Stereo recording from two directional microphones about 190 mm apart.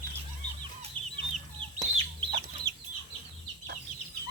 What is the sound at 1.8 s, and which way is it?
Chicken, 30° right (ahead or behind).